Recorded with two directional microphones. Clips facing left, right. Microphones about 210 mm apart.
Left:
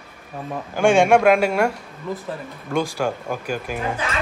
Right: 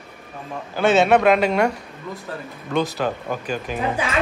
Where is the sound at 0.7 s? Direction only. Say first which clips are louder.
Left 1 dB; 15° left (ahead or behind).